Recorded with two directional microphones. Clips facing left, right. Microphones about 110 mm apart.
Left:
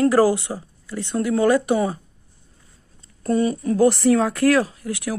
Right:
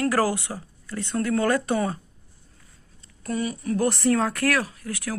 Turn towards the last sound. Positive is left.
turn(degrees=20)  # may be behind; listen again after turning